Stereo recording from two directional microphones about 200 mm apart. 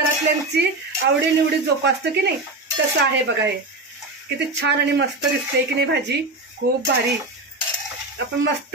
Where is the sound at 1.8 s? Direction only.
55° right (ahead or behind).